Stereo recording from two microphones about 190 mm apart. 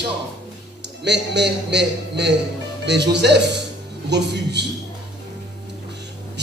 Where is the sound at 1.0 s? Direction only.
65° right (ahead or behind).